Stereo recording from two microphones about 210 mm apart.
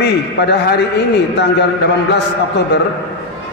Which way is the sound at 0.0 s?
50° left (ahead or behind).